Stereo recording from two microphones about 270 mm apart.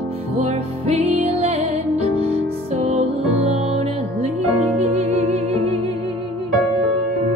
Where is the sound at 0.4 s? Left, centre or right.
Right.